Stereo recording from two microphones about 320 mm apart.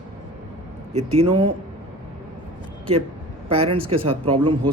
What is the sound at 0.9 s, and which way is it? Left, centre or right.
Speech, centre.